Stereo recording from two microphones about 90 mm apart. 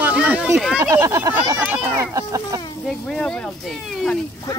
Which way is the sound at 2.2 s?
40° right (ahead or behind).